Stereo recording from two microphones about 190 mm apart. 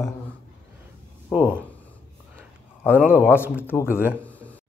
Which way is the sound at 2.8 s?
10° right (ahead or behind).